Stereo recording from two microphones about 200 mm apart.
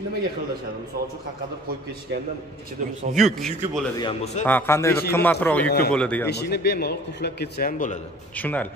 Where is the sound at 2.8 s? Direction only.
40° right (ahead or behind).